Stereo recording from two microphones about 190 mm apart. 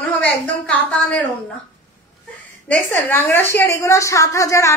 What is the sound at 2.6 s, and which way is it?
A woman's voice, 10° left (ahead or behind).